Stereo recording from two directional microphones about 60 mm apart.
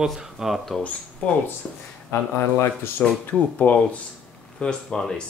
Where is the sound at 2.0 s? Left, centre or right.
Left.